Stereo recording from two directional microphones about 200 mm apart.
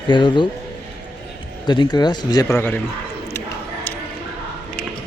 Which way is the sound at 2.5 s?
10° left (ahead or behind).